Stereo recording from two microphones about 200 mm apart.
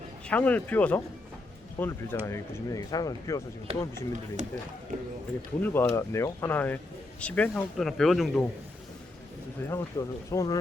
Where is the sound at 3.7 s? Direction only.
30° right (ahead or behind).